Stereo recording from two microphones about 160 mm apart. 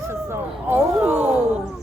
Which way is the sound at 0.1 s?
15° right (ahead or behind).